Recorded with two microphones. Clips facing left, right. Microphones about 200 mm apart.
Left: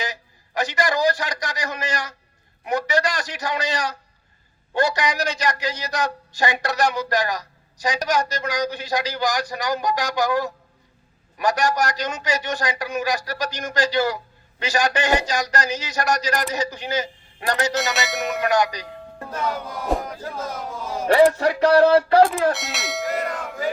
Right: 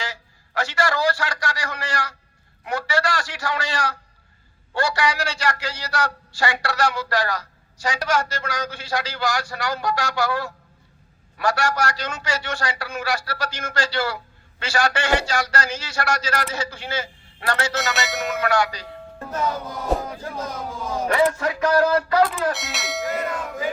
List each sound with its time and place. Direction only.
0.0 s a man's voice: 20° left (ahead or behind)
17.9 s speech: centre (ahead or behind)
18.3 s a man's voice: 20° left (ahead or behind)
21.1 s speech: 35° left (ahead or behind)
22.5 s speech: centre (ahead or behind)